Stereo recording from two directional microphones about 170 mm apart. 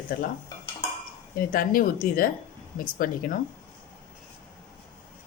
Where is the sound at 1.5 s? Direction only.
55° left (ahead or behind).